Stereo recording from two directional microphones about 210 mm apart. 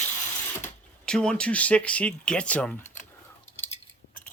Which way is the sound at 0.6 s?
5° left (ahead or behind).